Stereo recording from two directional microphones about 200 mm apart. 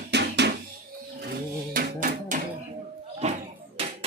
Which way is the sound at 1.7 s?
40° right (ahead or behind).